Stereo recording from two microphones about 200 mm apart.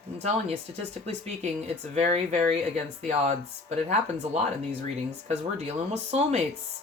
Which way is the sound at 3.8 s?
35° right (ahead or behind).